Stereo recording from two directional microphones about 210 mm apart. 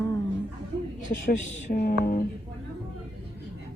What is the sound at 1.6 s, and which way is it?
Speech, 45° left (ahead or behind).